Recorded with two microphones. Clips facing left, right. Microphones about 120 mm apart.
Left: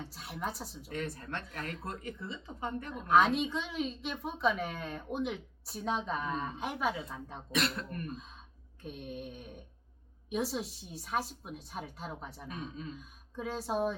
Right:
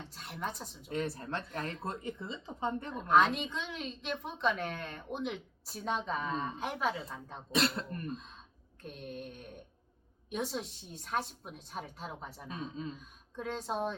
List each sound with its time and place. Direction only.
0.0 s speech: 5° left (ahead or behind)
0.9 s speech: 25° right (ahead or behind)
2.9 s a woman's voice: centre (ahead or behind)
7.5 s speech: 25° right (ahead or behind)
8.8 s a woman's voice: 5° left (ahead or behind)
12.5 s speech: 30° right (ahead or behind)
13.0 s speech: 5° left (ahead or behind)